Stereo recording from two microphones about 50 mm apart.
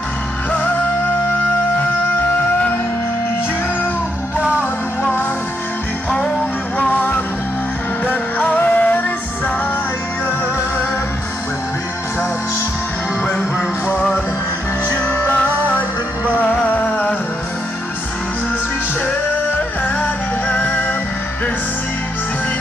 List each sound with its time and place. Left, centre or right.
0.5 s music: left
4.4 s music: right
6.8 s music: left
14.9 s music: left
15.3 s music: left
20.0 s music: left